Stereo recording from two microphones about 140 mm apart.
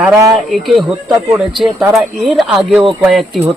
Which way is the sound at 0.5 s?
Centre (ahead or behind).